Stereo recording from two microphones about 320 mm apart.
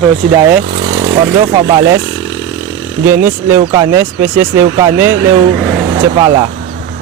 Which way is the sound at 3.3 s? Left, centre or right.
Centre.